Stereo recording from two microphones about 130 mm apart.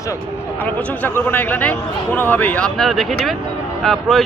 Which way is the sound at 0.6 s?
10° left (ahead or behind).